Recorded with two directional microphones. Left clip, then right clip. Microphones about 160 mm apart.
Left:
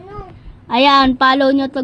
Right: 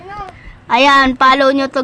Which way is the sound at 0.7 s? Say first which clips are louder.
Right 2 dB; 15° left (ahead or behind).